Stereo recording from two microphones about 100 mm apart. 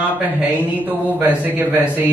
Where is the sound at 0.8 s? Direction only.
15° right (ahead or behind).